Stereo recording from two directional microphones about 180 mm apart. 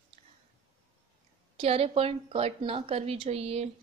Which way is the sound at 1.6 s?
35° right (ahead or behind).